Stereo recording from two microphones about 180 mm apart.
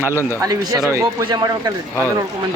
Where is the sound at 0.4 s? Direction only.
20° right (ahead or behind).